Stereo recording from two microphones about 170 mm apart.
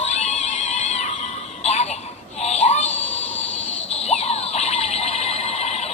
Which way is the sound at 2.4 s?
40° left (ahead or behind).